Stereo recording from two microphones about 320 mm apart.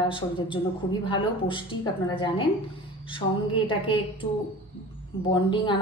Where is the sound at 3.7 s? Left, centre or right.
Centre.